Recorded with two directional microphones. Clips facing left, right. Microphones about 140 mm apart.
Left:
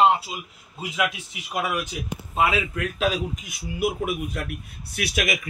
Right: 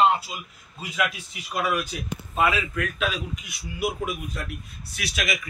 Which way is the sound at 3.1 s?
50° left (ahead or behind).